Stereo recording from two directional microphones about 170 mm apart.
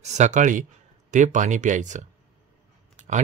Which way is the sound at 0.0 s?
45° right (ahead or behind).